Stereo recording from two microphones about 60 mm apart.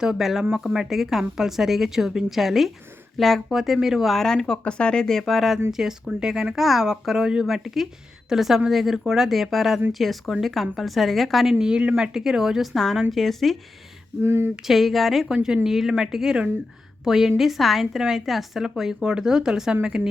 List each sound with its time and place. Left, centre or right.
0.0 s speech: centre
11.6 s speech: centre
12.7 s speech: centre
14.2 s speech: right
14.7 s speech: centre